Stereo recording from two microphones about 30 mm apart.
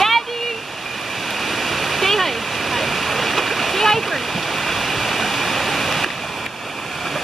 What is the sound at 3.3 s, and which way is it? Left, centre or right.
Splash, centre.